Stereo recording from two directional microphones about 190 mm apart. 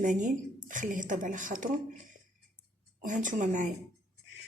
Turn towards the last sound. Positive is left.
turn(degrees=-45)  # may be behind; listen again after turning